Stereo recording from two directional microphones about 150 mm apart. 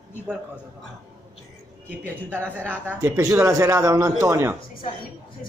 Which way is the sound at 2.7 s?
15° right (ahead or behind).